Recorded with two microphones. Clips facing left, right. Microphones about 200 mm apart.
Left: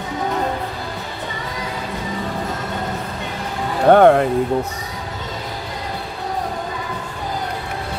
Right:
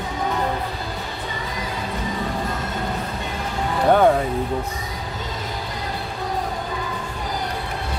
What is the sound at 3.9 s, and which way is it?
Music, 65° left (ahead or behind).